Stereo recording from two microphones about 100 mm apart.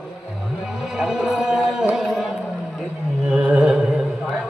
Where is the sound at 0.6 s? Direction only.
5° right (ahead or behind).